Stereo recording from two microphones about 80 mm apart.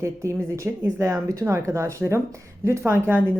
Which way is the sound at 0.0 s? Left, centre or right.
Right.